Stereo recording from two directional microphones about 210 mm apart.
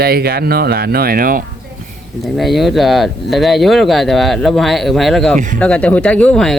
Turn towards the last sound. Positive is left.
turn(degrees=0)  # may be behind; listen again after turning